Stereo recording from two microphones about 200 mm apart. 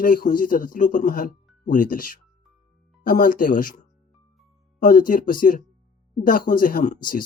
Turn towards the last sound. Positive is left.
turn(degrees=40)  # may be behind; listen again after turning